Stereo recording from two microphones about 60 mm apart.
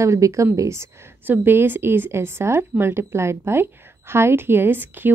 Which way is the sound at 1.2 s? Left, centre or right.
Right.